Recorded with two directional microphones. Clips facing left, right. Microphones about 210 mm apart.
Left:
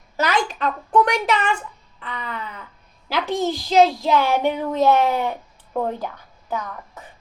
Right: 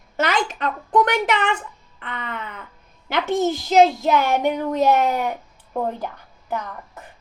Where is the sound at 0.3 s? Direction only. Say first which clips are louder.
Left 1 dB; 20° right (ahead or behind).